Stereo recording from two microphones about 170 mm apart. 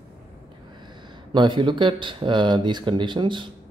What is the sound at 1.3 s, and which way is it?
Speech, 25° right (ahead or behind).